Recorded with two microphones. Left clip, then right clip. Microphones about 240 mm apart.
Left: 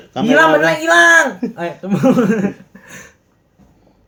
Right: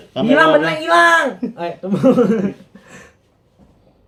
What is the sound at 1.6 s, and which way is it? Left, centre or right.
Speech, left.